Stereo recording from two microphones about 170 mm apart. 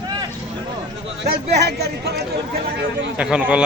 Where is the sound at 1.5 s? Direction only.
75° right (ahead or behind).